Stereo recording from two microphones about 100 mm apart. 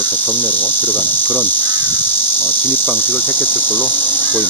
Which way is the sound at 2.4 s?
20° left (ahead or behind).